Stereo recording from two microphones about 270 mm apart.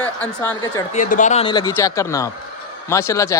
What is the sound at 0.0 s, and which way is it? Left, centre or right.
Speech, centre.